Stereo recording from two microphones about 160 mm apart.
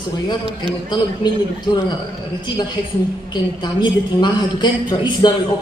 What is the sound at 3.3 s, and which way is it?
A woman's voice, 25° left (ahead or behind).